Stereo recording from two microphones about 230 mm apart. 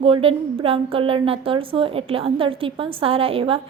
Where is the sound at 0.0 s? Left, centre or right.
Right.